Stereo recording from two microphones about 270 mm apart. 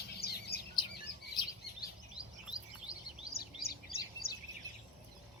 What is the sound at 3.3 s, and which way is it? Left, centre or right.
Bird vocalization, left.